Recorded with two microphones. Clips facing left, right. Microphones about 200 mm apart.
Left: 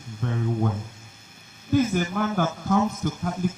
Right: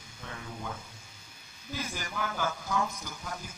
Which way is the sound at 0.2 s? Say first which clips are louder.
Left 16 dB; 55° left (ahead or behind).